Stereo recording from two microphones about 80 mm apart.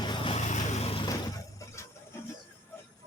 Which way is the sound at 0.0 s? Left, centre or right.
Left.